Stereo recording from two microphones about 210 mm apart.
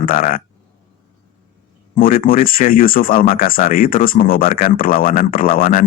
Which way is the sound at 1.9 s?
40° left (ahead or behind).